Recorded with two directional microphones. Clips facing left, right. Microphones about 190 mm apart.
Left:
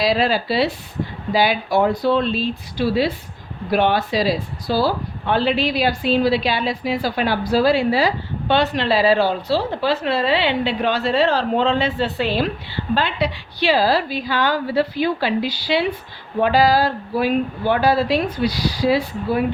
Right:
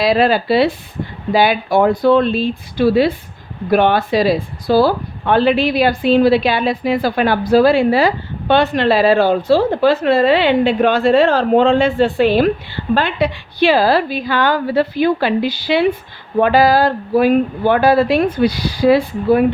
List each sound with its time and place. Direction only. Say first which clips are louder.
0.0 s speech: right 5 dB; 55° right (ahead or behind)